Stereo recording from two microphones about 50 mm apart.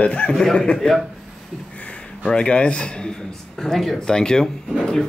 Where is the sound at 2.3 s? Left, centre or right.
Left.